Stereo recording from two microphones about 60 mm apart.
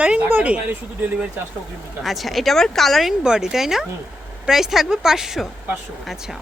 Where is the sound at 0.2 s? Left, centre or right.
Right.